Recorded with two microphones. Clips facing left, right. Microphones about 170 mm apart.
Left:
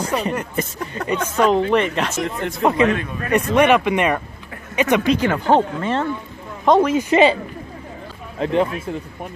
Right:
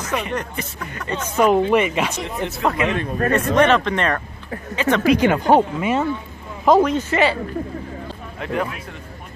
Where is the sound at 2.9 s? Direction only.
45° right (ahead or behind).